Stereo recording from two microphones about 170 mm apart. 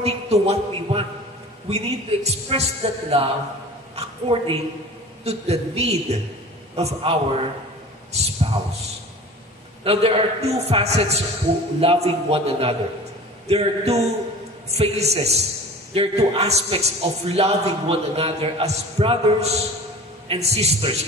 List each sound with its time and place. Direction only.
0.0 s a man's voice: 35° right (ahead or behind)
9.8 s a man's voice: 35° right (ahead or behind)